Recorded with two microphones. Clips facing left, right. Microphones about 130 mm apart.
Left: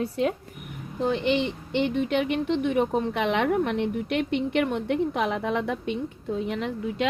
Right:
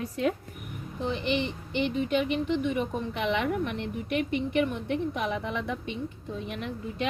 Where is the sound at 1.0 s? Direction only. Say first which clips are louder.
Left 5 dB; 70° left (ahead or behind).